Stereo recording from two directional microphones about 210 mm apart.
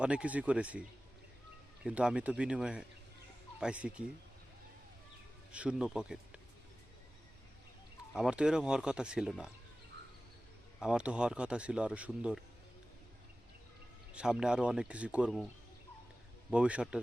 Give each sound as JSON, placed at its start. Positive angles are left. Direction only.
{"t": 0.0, "sound": "speech", "side_deg": -5}
{"t": 5.5, "sound": "speech", "side_deg": -5}
{"t": 8.1, "sound": "speech", "side_deg": -5}
{"t": 10.8, "sound": "speech", "side_deg": -5}
{"t": 14.1, "sound": "speech", "side_deg": -5}
{"t": 16.5, "sound": "speech", "side_deg": -5}